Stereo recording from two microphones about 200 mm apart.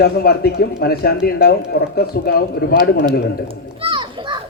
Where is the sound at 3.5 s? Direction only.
25° right (ahead or behind).